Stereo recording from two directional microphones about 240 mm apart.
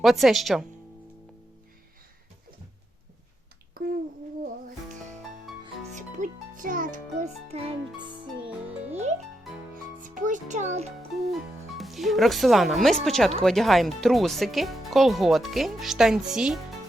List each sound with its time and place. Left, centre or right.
0.0 s speech: centre
3.8 s a sound: right
5.9 s music: right
10.0 s music: right
11.3 s speech: centre